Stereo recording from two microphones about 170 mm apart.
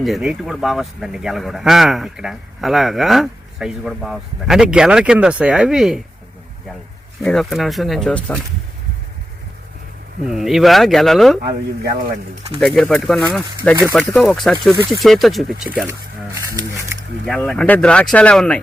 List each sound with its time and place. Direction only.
0.0 s a man's voice: centre (ahead or behind)
7.2 s a man's voice: centre (ahead or behind)
10.2 s a man's voice: centre (ahead or behind)
11.4 s speech: 70° right (ahead or behind)
12.5 s a man's voice: 5° left (ahead or behind)
15.9 s speech: 20° right (ahead or behind)
17.2 s a man's voice: 5° left (ahead or behind)